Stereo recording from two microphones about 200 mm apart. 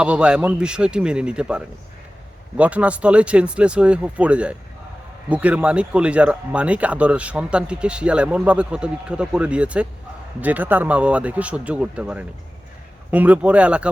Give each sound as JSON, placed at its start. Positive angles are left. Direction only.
{"t": 0.0, "sound": "speech", "side_deg": -5}